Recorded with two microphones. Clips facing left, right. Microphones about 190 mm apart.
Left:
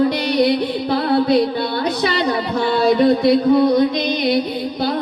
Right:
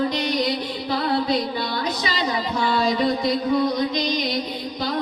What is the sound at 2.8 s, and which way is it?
Music, 60° left (ahead or behind).